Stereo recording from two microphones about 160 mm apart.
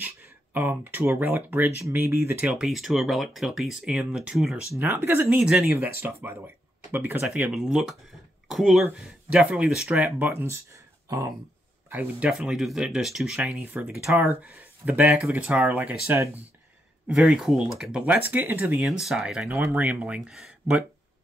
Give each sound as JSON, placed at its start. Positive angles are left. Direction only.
{"t": 0.0, "sound": "speech", "side_deg": -10}